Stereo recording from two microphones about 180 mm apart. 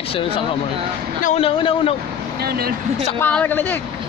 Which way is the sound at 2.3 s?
60° right (ahead or behind).